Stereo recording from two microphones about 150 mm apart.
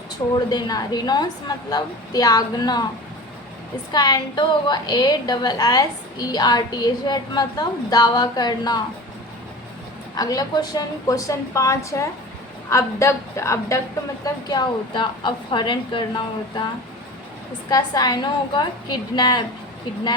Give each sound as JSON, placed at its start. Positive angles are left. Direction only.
{"t": 0.3, "sound": "a woman's voice", "side_deg": 25}
{"t": 3.9, "sound": "a woman's voice", "side_deg": 25}
{"t": 10.2, "sound": "a woman's voice", "side_deg": 25}
{"t": 14.5, "sound": "a woman's voice", "side_deg": 30}
{"t": 17.7, "sound": "a woman's voice", "side_deg": 25}